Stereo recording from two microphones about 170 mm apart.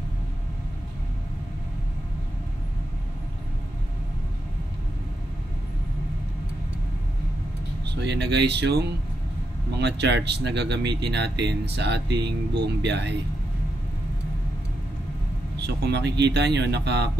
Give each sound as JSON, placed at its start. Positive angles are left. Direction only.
{"t": 7.8, "sound": "speech", "side_deg": -90}
{"t": 15.6, "sound": "speech", "side_deg": -80}